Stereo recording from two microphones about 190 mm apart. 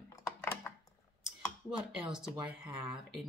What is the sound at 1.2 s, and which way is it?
Speech, 5° right (ahead or behind).